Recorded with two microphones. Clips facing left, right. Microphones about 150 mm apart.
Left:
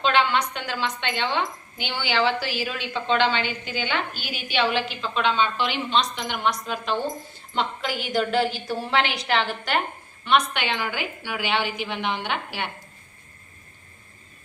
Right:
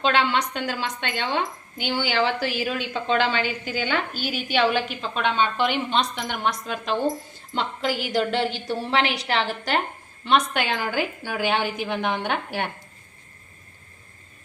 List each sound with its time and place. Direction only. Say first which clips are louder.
0.0 s a woman's voice: even; 40° right (ahead or behind)
7.8 s a woman's voice: right 2 dB; 35° right (ahead or behind)